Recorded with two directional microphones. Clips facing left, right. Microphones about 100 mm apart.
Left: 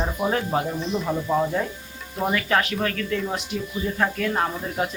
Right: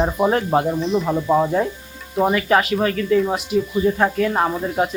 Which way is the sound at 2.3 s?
5° right (ahead or behind).